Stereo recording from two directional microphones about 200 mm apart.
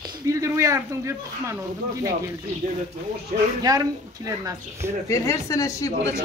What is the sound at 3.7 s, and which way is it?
Speech, 20° right (ahead or behind).